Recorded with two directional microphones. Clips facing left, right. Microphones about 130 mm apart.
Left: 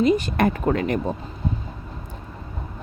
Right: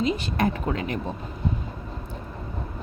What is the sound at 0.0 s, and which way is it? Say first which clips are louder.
Speech: left 5 dB; 50° left (ahead or behind).